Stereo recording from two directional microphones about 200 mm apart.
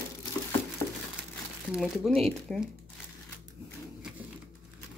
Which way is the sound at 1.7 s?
5° right (ahead or behind).